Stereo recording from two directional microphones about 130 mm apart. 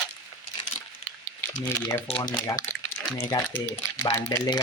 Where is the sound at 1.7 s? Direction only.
20° left (ahead or behind).